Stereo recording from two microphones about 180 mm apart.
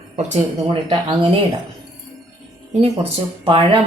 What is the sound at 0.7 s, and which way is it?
Speech, 25° right (ahead or behind).